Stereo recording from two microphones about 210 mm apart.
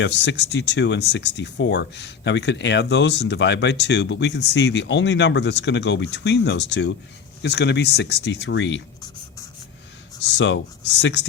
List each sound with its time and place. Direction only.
0.0 s speech: 55° left (ahead or behind)
10.2 s speech: 60° left (ahead or behind)